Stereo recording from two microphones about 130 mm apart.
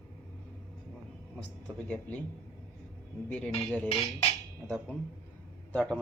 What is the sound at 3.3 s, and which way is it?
A man's voice, 10° left (ahead or behind).